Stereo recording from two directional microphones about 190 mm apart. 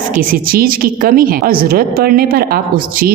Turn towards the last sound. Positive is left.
turn(degrees=-50)  # may be behind; listen again after turning